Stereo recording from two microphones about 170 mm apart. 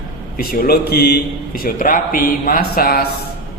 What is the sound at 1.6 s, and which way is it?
A man's voice, 55° left (ahead or behind).